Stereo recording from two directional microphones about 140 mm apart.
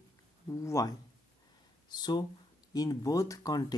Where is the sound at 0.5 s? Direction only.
20° left (ahead or behind).